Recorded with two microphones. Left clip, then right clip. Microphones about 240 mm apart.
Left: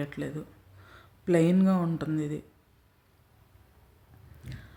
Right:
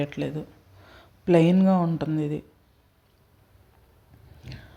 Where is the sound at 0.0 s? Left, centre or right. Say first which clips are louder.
Right 6 dB; centre.